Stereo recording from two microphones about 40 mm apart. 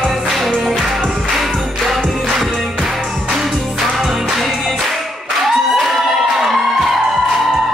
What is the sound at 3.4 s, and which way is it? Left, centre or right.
Music, centre.